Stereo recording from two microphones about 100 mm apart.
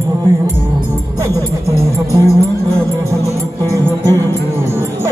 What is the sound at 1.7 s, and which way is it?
Music, 30° right (ahead or behind).